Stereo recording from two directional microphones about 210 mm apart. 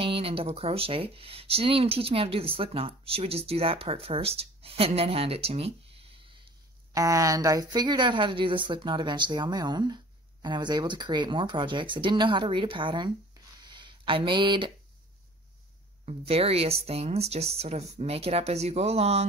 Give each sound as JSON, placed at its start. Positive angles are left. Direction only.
{"t": 0.0, "sound": "speech", "side_deg": -25}
{"t": 6.9, "sound": "speech", "side_deg": -15}
{"t": 13.7, "sound": "a sound", "side_deg": -20}
{"t": 16.1, "sound": "speech", "side_deg": -30}